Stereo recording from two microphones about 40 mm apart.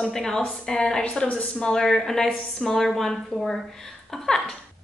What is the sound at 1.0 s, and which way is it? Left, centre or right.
Speech, left.